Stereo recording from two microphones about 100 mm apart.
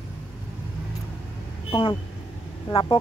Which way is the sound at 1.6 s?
65° left (ahead or behind).